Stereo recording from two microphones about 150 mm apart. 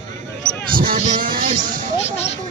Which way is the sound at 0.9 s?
60° right (ahead or behind).